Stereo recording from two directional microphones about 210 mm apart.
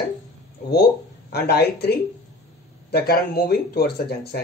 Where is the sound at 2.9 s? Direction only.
45° left (ahead or behind).